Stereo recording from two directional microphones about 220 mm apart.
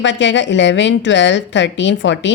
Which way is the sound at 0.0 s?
55° left (ahead or behind).